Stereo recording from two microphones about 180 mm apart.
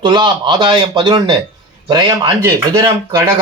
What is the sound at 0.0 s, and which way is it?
A man's voice, 25° right (ahead or behind).